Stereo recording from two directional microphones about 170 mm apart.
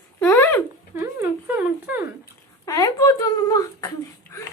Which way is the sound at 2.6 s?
20° left (ahead or behind).